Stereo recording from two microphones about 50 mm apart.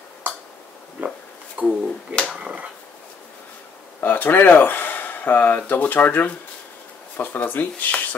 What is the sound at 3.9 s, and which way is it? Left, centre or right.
Speech, left.